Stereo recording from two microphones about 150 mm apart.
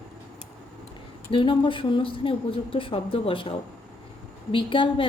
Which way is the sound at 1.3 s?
35° left (ahead or behind).